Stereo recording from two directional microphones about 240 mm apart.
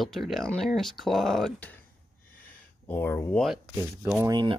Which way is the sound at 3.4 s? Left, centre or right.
Centre.